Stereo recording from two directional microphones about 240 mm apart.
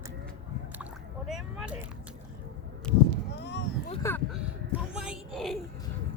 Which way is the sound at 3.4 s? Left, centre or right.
Left.